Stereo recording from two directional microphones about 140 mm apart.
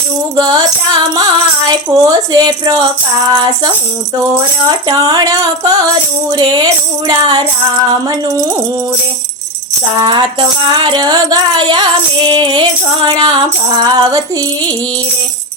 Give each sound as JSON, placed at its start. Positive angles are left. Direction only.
{"t": 0.3, "sound": "speech", "side_deg": -30}
{"t": 1.6, "sound": "speech", "side_deg": -25}
{"t": 6.3, "sound": "music", "side_deg": -30}
{"t": 10.0, "sound": "music", "side_deg": -35}